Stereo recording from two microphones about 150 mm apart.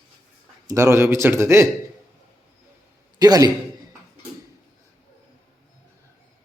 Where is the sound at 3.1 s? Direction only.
25° right (ahead or behind).